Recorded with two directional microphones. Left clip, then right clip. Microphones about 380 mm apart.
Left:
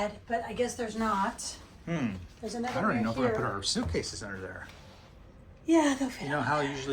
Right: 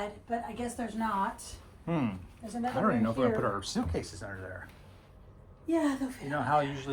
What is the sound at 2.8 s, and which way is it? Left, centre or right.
Speech, centre.